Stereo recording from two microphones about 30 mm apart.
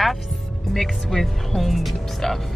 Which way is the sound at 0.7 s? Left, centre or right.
Centre.